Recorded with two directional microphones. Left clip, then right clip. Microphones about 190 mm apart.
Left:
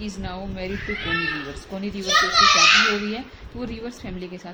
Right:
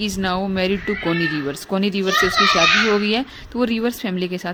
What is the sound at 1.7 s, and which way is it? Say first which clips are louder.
Speech: right 11 dB; 50° right (ahead or behind).